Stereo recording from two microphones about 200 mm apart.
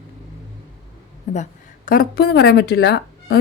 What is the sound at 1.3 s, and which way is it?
A woman's voice, 40° left (ahead or behind).